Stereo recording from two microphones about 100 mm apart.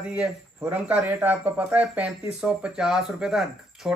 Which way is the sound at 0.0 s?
10° right (ahead or behind).